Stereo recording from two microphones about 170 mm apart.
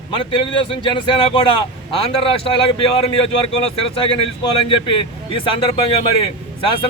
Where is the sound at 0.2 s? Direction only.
30° left (ahead or behind).